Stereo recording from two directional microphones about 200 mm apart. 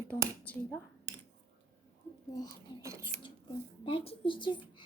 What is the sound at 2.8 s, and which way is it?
Speech, 15° right (ahead or behind).